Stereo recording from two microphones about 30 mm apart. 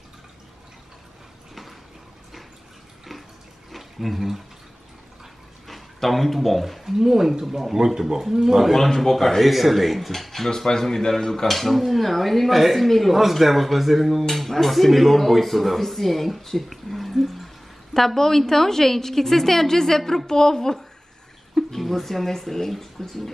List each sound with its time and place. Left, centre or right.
3.7 s a sound: centre
5.7 s a man's voice: centre
6.8 s speech: centre
8.7 s speech: centre
17.9 s a woman's voice: centre
21.7 s speech: centre